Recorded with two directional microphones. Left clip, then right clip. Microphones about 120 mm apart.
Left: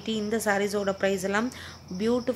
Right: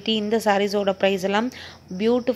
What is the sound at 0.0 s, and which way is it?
A woman's voice, 35° right (ahead or behind).